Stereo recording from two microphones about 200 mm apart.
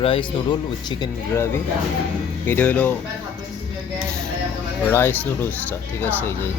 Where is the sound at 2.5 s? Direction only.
10° left (ahead or behind).